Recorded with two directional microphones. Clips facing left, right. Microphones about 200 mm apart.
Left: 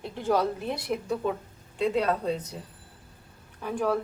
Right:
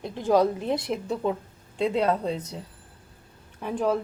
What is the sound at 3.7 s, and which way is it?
Speech, 20° right (ahead or behind).